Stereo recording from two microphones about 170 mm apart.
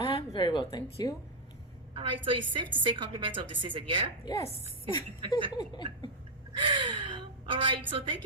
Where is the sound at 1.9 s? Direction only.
30° right (ahead or behind).